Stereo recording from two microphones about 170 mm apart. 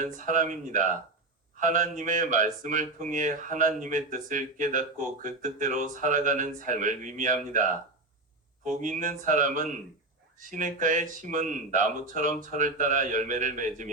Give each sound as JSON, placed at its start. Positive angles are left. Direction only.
{"t": 0.0, "sound": "speech", "side_deg": -50}
{"t": 8.6, "sound": "speech", "side_deg": -45}